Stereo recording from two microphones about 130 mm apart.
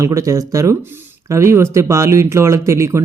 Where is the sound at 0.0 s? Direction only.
25° right (ahead or behind).